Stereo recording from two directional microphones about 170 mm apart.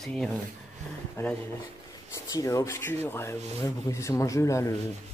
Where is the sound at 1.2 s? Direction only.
15° left (ahead or behind).